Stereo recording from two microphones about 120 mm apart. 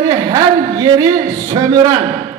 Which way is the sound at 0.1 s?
30° right (ahead or behind).